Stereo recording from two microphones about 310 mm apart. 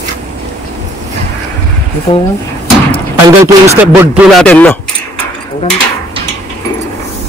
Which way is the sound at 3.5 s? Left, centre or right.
Centre.